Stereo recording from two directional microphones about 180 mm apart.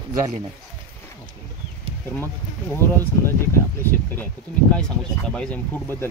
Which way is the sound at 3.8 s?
10° left (ahead or behind).